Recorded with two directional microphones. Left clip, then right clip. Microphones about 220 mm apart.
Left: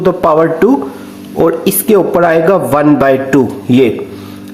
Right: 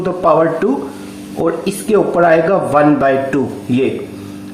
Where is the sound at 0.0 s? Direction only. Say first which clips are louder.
Left 3 dB; 45° left (ahead or behind).